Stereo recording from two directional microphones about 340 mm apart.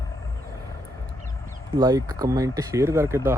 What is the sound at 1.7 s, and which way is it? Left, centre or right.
Speech, centre.